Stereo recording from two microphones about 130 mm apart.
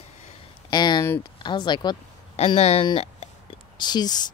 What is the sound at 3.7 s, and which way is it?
Speech, 35° left (ahead or behind).